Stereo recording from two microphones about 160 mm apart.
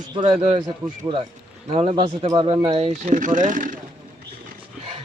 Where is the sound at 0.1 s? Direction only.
30° right (ahead or behind).